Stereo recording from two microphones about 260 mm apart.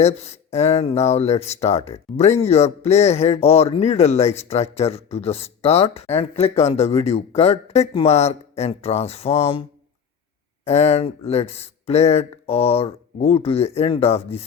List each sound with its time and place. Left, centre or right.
0.0 s speech: left